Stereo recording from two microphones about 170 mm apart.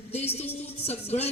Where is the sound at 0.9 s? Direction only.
40° left (ahead or behind).